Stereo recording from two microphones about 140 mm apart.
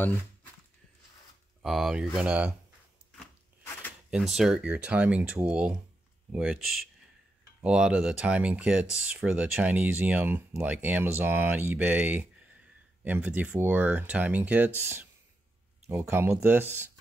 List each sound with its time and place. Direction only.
1.6 s speech: centre (ahead or behind)
4.1 s speech: centre (ahead or behind)